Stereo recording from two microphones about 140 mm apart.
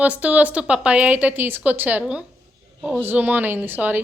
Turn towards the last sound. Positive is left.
turn(degrees=-15)  # may be behind; listen again after turning